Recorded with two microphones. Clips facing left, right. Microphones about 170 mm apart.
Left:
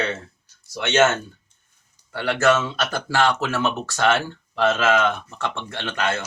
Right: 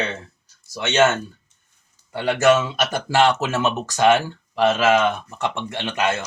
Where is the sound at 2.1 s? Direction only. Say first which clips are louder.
Right 3 dB; 20° right (ahead or behind).